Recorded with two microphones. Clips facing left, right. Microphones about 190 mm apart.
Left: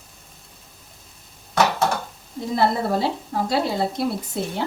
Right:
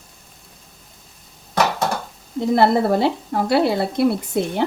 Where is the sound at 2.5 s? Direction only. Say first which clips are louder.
Right 5 dB; 65° right (ahead or behind).